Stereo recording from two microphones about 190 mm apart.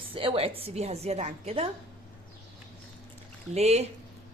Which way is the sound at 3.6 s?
35° right (ahead or behind).